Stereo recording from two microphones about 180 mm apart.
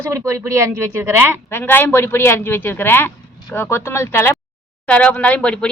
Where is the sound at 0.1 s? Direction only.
15° right (ahead or behind).